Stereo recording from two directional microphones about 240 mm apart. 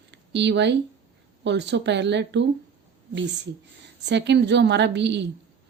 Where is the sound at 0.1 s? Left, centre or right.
Right.